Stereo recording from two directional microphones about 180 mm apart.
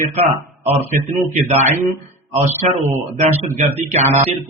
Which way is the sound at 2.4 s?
40° right (ahead or behind).